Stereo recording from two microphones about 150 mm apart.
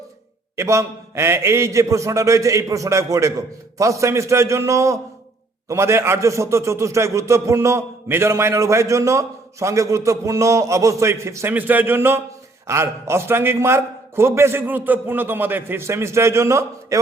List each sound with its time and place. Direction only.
0.5 s a man's voice: 20° right (ahead or behind)